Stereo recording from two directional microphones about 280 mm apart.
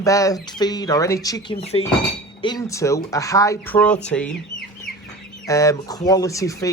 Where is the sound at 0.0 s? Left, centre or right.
Centre.